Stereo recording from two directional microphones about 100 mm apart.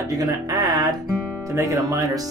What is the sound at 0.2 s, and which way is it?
Speech, 40° right (ahead or behind).